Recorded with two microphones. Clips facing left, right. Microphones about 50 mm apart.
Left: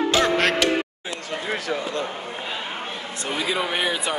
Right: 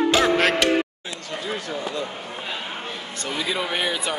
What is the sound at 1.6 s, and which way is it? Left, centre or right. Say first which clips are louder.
Speech: left 2 dB; left.